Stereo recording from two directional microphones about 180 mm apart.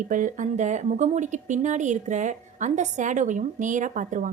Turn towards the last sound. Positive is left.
turn(degrees=-45)  # may be behind; listen again after turning